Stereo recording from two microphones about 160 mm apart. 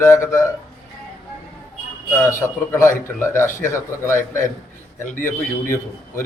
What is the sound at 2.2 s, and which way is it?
A man's voice, 15° left (ahead or behind).